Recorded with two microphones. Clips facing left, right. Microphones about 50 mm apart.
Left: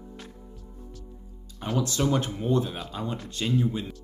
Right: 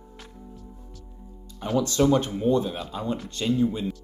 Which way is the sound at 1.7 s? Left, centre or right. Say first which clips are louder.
Right 5 dB; centre.